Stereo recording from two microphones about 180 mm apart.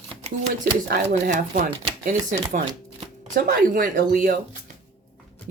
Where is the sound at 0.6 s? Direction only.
65° right (ahead or behind).